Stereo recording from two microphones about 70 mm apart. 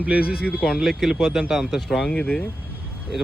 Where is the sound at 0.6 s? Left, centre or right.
Centre.